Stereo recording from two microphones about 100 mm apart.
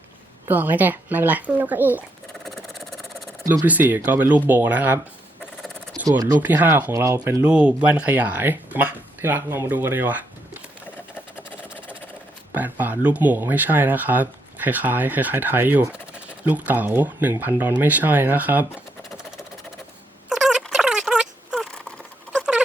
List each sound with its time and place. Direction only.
0.4 s speech: 20° right (ahead or behind)
2.4 s engine: centre (ahead or behind)
3.7 s speech: 20° right (ahead or behind)
5.6 s a sound: 5° left (ahead or behind)
6.1 s speech: 35° right (ahead or behind)
6.4 s speech: 20° right (ahead or behind)
6.9 s speech: 30° right (ahead or behind)
7.4 s speech: 15° right (ahead or behind)
11.3 s engine: 15° right (ahead or behind)
12.8 s speech: 15° right (ahead or behind)
20.3 s rodents: 5° right (ahead or behind)
22.4 s a sound: 10° right (ahead or behind)